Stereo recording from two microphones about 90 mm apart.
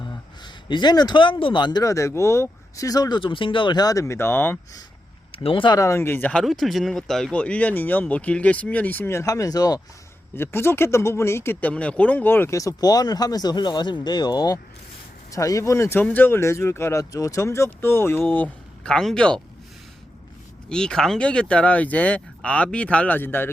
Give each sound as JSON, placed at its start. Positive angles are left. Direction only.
{"t": 0.4, "sound": "speech", "side_deg": 55}
{"t": 1.8, "sound": "speech", "side_deg": 35}
{"t": 5.3, "sound": "speech", "side_deg": 90}
{"t": 5.7, "sound": "speech", "side_deg": 35}
{"t": 6.0, "sound": "speech", "side_deg": 25}
{"t": 6.4, "sound": "speech", "side_deg": 0}
{"t": 7.3, "sound": "speech", "side_deg": 15}
{"t": 9.2, "sound": "speech", "side_deg": 40}
{"t": 10.3, "sound": "speech", "side_deg": 25}
{"t": 11.6, "sound": "speech", "side_deg": 15}
{"t": 12.5, "sound": "speech", "side_deg": 40}
{"t": 15.3, "sound": "speech", "side_deg": 40}
{"t": 18.8, "sound": "speech", "side_deg": 5}
{"t": 20.7, "sound": "speech", "side_deg": 10}